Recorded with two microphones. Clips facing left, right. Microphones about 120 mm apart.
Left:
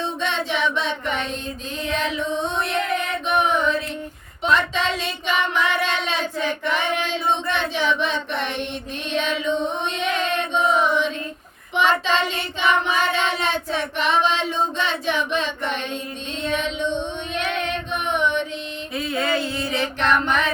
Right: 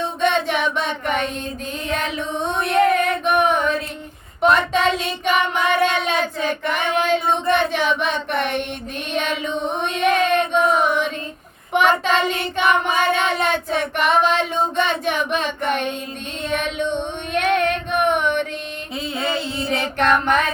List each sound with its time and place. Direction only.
0.2 s a sound: 50° right (ahead or behind)
1.9 s music: 55° right (ahead or behind)
4.4 s child singing: 50° right (ahead or behind)
9.7 s chant: 50° right (ahead or behind)
11.7 s child singing: 50° right (ahead or behind)
16.4 s female singing: 55° right (ahead or behind)
18.9 s a sound: 25° right (ahead or behind)
20.0 s child singing: 50° right (ahead or behind)